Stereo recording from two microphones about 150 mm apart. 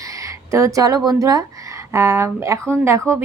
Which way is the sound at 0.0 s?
20° right (ahead or behind).